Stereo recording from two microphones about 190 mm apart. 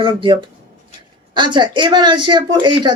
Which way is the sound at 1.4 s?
25° right (ahead or behind).